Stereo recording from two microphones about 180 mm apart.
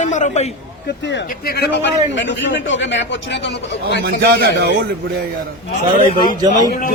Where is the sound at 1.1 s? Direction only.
65° left (ahead or behind); by 3.0 s 90° left.